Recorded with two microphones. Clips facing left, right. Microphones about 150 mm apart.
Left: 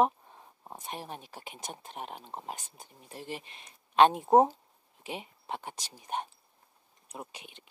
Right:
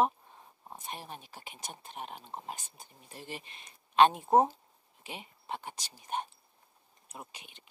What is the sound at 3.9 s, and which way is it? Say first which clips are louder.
Speech: left 2 dB; 15° left (ahead or behind).